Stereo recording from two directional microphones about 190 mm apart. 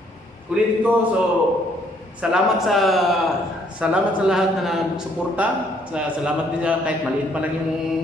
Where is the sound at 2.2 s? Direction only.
Centre (ahead or behind).